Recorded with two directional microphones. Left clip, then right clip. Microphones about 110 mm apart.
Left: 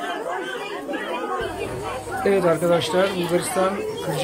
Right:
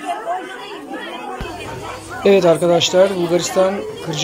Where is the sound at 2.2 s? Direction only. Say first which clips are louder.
Right 7 dB; 25° right (ahead or behind).